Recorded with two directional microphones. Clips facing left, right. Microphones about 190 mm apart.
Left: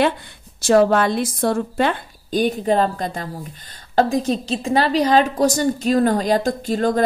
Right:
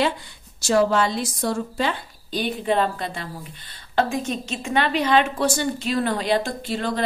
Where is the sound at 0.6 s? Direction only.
55° left (ahead or behind).